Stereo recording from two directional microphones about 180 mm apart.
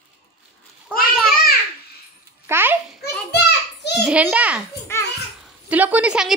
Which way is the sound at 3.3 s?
65° left (ahead or behind).